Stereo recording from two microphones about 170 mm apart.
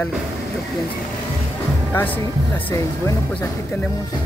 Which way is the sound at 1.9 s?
10° left (ahead or behind).